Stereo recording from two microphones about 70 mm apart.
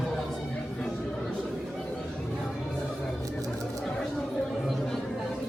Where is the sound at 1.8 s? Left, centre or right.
Centre.